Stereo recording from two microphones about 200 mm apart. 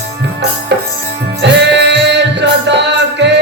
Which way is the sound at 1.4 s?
60° right (ahead or behind).